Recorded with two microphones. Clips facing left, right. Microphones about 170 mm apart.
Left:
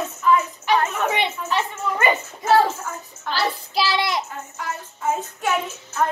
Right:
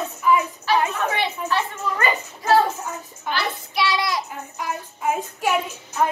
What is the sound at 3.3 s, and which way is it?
Child singing, 30° left (ahead or behind).